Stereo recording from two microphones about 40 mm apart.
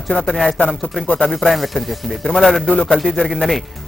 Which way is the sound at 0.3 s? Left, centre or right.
Centre.